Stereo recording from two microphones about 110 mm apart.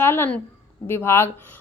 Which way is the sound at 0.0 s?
20° left (ahead or behind).